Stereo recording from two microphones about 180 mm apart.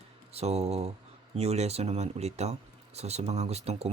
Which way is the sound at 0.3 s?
35° right (ahead or behind).